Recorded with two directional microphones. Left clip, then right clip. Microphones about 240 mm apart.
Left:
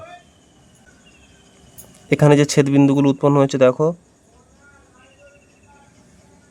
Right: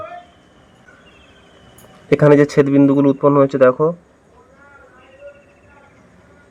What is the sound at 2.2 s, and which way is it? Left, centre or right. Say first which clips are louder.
Speech: right 3 dB; left.